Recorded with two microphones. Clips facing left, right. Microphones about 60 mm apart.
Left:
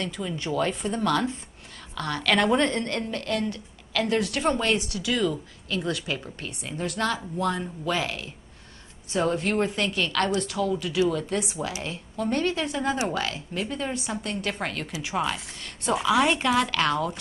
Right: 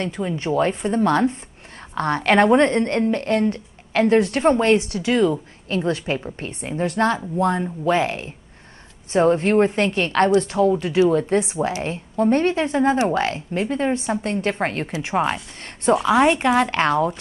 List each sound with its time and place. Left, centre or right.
0.0 s a woman's voice: right